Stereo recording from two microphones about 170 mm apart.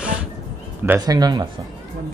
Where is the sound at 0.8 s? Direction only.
20° right (ahead or behind).